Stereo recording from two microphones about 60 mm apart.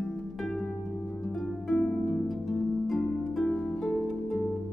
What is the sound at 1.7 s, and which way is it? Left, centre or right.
Harp, centre.